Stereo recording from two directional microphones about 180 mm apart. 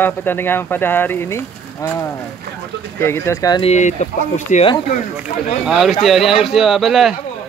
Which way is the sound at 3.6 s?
40° left (ahead or behind).